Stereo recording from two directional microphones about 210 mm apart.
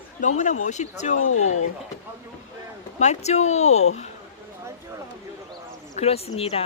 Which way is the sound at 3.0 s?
35° left (ahead or behind).